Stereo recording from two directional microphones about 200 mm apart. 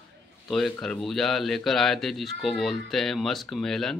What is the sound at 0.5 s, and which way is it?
Speech, centre (ahead or behind).